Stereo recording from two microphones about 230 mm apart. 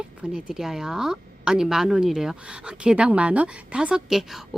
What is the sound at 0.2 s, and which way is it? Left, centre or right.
Speech, centre.